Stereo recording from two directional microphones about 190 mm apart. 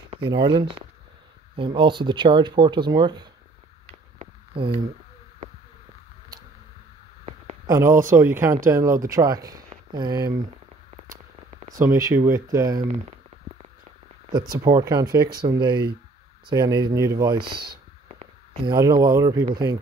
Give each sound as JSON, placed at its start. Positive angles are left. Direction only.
{"t": 0.1, "sound": "speech", "side_deg": -25}
{"t": 3.8, "sound": "a sound", "side_deg": -30}
{"t": 7.6, "sound": "speech", "side_deg": -15}
{"t": 11.8, "sound": "speech", "side_deg": -15}
{"t": 14.5, "sound": "speech", "side_deg": -20}
{"t": 18.7, "sound": "speech", "side_deg": -20}